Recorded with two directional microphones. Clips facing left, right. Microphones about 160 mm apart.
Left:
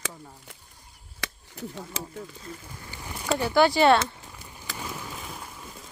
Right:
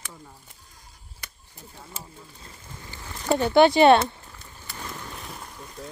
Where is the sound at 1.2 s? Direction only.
90° left.